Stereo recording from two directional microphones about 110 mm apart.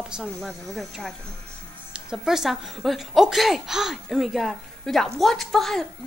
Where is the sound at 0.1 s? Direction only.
Centre (ahead or behind).